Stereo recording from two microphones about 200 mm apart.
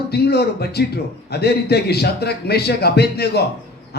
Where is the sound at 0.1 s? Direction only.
55° left (ahead or behind).